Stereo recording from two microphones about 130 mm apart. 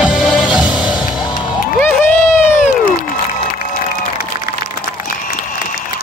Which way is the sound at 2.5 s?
65° left (ahead or behind).